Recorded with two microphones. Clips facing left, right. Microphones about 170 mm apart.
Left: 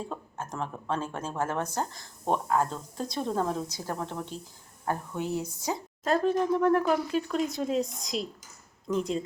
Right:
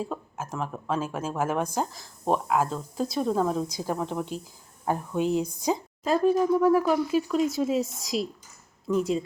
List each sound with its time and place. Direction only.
0.1 s speech: 5° right (ahead or behind)